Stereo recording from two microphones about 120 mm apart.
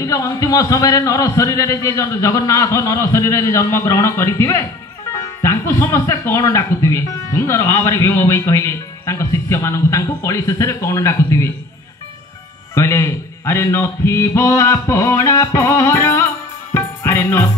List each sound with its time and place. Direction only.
0.0 s speech: 30° left (ahead or behind)
12.7 s speech: 25° left (ahead or behind)
16.7 s music: 25° left (ahead or behind)